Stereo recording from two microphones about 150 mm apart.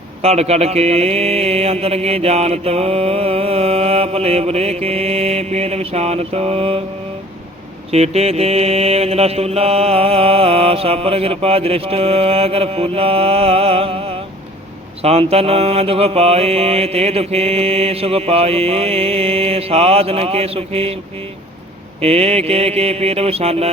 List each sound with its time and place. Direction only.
0.2 s mantra: 45° right (ahead or behind)
7.9 s mantra: 45° right (ahead or behind)
15.0 s mantra: 45° right (ahead or behind)
22.0 s mantra: 45° right (ahead or behind)